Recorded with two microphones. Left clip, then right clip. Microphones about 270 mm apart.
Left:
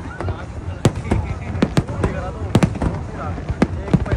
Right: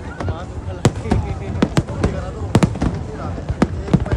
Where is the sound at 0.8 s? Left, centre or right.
Centre.